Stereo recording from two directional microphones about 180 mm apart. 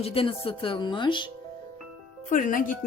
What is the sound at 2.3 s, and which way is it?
Speech, 45° left (ahead or behind).